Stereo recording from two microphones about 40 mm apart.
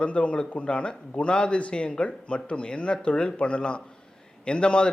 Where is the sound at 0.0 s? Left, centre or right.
Left.